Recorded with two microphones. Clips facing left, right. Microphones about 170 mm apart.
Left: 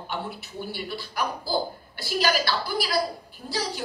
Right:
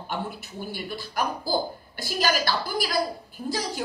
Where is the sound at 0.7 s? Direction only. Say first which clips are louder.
Right 3 dB; 45° right (ahead or behind).